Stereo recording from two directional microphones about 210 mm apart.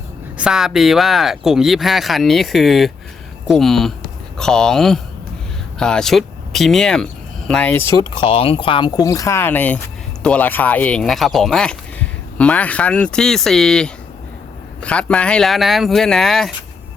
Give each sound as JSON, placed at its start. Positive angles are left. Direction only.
{"t": 0.3, "sound": "speech", "side_deg": -5}
{"t": 8.1, "sound": "speech", "side_deg": 25}